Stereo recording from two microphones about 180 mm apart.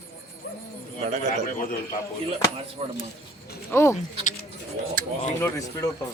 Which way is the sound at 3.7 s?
15° left (ahead or behind).